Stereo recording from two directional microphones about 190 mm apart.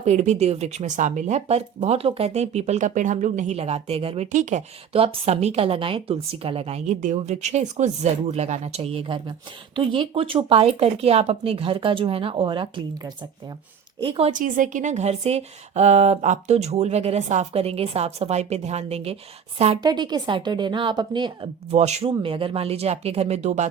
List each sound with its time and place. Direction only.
0.0 s speech: 35° right (ahead or behind)
14.0 s speech: 30° right (ahead or behind)
14.3 s speech: 45° right (ahead or behind)
19.8 s speech: 20° right (ahead or behind)
21.8 s speech: 35° right (ahead or behind)